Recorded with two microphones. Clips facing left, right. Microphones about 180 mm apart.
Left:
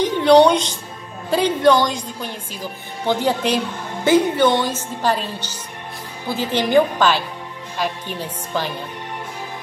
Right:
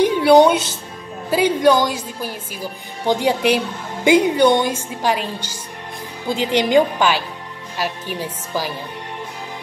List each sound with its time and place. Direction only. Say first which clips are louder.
0.0 s music: right 1 dB; 10° right (ahead or behind)
1.3 s speech: even; 10° right (ahead or behind)